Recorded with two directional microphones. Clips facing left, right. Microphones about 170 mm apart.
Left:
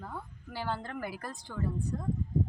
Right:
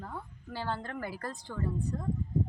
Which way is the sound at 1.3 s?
15° right (ahead or behind).